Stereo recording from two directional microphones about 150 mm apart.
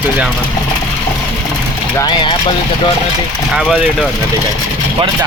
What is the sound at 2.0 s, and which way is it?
Speech, 30° left (ahead or behind).